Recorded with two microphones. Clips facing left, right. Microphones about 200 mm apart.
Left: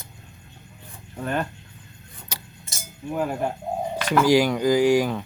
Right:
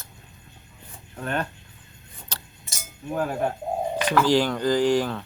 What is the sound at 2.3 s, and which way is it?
Glass, 10° left (ahead or behind).